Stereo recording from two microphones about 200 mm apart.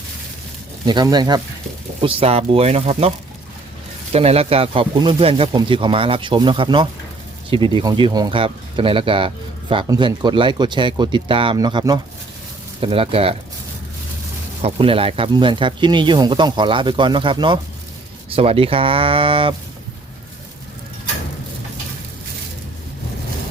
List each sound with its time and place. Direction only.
0.9 s speech: 20° right (ahead or behind)
4.1 s speech: 30° right (ahead or behind)
14.6 s speech: 25° right (ahead or behind)